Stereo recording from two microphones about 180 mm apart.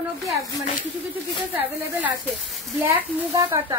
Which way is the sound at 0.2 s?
20° right (ahead or behind).